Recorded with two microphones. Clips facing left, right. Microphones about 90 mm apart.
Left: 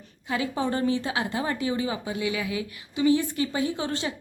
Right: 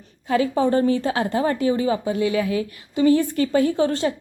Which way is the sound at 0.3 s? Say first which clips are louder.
Right 8 dB; 40° right (ahead or behind).